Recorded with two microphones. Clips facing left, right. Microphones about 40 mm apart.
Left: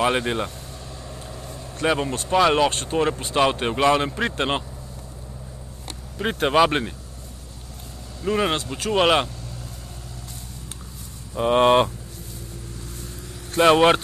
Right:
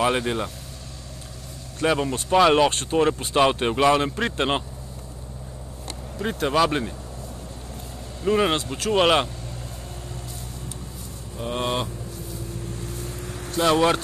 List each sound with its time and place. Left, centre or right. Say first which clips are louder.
0.0 s speech: left 1 dB; centre
1.8 s speech: even; centre
6.1 s speech: left 3 dB; left
8.2 s speech: right 1 dB; centre
11.3 s speech: left 10 dB; left
13.6 s speech: left 4 dB; left